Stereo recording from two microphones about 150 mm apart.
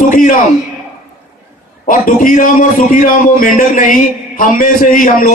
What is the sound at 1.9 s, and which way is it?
A man's voice, 65° left (ahead or behind).